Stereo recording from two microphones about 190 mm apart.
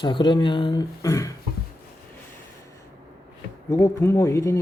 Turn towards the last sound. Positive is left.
turn(degrees=15)  # may be behind; listen again after turning